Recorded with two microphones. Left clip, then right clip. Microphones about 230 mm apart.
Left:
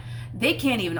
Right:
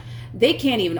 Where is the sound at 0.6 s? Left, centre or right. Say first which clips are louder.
Right 4 dB; left.